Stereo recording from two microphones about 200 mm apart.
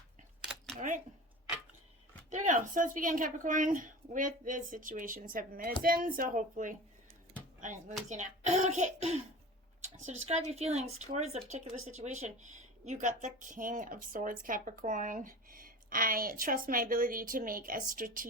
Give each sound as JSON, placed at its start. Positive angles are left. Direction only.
{"t": 0.8, "sound": "speech", "side_deg": -40}
{"t": 2.3, "sound": "speech", "side_deg": -40}
{"t": 10.2, "sound": "speech", "side_deg": -35}